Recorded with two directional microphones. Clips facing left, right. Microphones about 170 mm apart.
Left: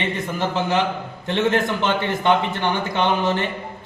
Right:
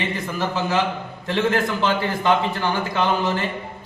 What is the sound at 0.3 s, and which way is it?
A man's voice, 25° left (ahead or behind).